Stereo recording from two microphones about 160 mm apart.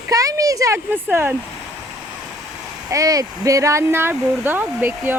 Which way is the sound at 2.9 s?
20° right (ahead or behind).